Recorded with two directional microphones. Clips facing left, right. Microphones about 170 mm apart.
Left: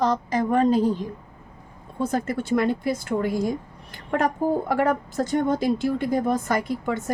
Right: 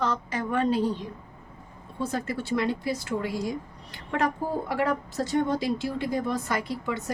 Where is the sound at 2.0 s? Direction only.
50° left (ahead or behind).